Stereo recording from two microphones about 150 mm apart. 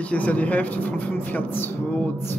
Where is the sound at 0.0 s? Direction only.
10° left (ahead or behind).